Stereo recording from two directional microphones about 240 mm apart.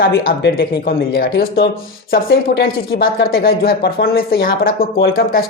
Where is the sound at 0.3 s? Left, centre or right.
Left.